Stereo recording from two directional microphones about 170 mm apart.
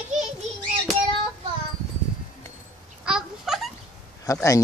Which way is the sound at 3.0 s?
5° right (ahead or behind).